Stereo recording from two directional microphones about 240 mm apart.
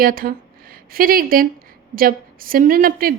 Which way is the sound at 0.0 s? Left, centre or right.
Right.